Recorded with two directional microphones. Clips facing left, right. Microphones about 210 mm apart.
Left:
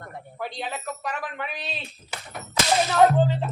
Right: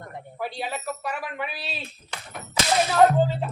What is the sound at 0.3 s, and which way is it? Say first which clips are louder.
Speech: right 2 dB; 10° right (ahead or behind).